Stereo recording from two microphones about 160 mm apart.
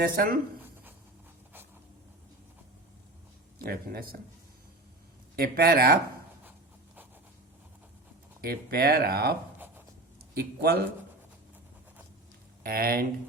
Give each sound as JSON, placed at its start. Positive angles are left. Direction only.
{"t": 0.0, "sound": "speech", "side_deg": -70}
{"t": 3.6, "sound": "speech", "side_deg": -65}
{"t": 5.4, "sound": "speech", "side_deg": -70}
{"t": 8.4, "sound": "speech", "side_deg": -70}
{"t": 10.3, "sound": "speech", "side_deg": -75}
{"t": 12.6, "sound": "speech", "side_deg": -70}